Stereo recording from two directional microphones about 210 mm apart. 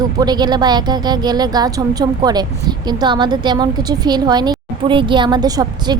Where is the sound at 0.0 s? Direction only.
20° right (ahead or behind).